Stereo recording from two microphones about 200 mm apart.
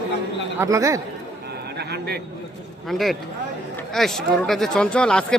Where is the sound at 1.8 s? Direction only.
55° right (ahead or behind).